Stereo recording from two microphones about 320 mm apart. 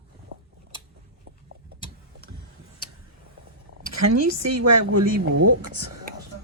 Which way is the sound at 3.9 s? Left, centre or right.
Right.